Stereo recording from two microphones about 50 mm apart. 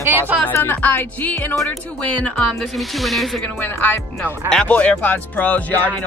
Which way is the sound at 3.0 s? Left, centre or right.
Centre.